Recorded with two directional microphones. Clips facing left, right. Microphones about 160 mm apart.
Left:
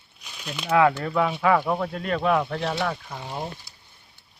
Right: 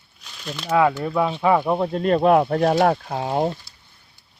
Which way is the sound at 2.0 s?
40° right (ahead or behind).